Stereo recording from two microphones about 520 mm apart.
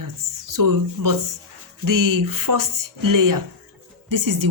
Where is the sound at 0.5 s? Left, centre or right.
Right.